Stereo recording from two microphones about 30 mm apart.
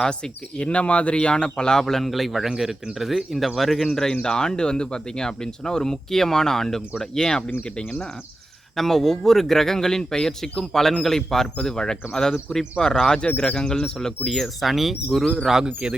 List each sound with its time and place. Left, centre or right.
0.1 s speech: left
1.5 s speech: left
1.8 s speech: centre
4.2 s speech: left
7.3 s speech: left
8.7 s speech: centre
11.6 s speech: left
13.1 s speech: left
13.7 s speech: left
14.3 s speech: centre
15.6 s speech: right